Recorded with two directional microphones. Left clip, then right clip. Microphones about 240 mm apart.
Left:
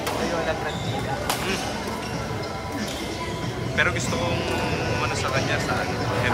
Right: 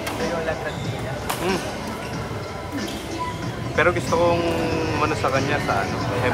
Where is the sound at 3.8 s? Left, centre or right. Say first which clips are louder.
Right 4 dB; centre.